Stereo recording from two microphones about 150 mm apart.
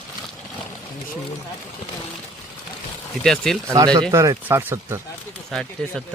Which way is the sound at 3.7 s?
25° right (ahead or behind).